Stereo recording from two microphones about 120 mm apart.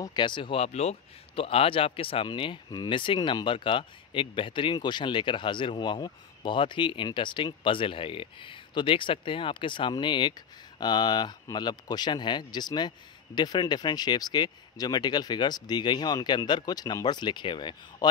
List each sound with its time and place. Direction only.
0.0 s speech: 40° left (ahead or behind)